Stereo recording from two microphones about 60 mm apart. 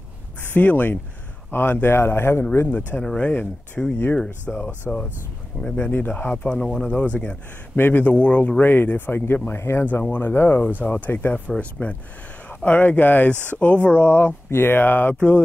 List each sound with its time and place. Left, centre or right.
0.4 s speech: left
3.0 s speech: centre
6.3 s speech: centre; by 11.4 s left
11.4 s speech: left
14.0 s speech: left